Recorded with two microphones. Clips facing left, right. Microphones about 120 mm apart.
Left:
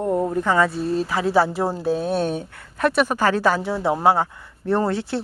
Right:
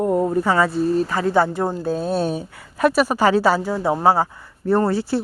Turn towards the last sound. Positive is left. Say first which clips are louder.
# right 3 dB
turn(degrees=-5)  # may be behind; listen again after turning